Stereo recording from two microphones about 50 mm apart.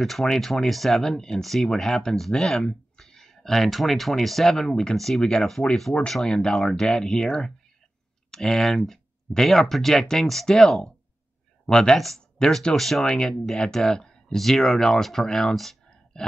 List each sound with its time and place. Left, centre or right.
0.0 s speech: centre
6.5 s speech: centre
13.0 s speech: centre